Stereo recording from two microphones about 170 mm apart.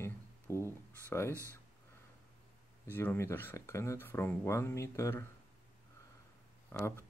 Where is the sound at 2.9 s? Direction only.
10° left (ahead or behind).